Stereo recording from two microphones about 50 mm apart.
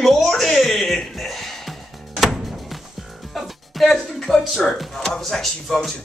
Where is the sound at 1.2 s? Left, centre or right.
Centre.